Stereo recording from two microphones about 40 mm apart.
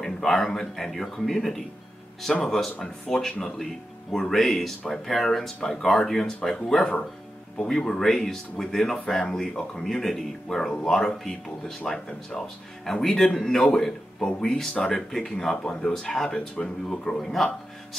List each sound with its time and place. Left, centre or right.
0.0 s a sound: centre
0.5 s speech: centre
15.9 s speech: centre
16.3 s speech: left
17.2 s speech: centre